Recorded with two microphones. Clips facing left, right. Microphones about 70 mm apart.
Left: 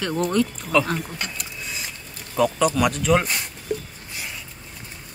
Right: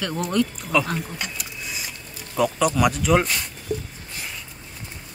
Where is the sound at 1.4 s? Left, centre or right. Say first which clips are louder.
Even; centre.